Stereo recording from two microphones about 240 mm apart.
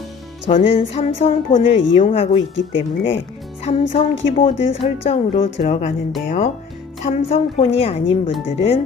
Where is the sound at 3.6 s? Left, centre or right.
Left.